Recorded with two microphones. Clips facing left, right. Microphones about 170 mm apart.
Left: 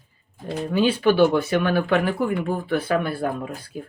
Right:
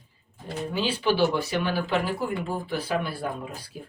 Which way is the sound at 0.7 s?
55° left (ahead or behind).